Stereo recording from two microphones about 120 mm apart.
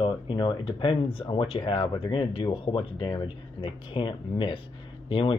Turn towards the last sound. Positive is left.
turn(degrees=45)  # may be behind; listen again after turning